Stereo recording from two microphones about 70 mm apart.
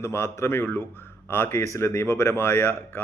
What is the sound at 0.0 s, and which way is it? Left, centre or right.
A man's voice, left.